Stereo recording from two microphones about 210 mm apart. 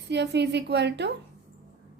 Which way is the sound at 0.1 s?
55° right (ahead or behind).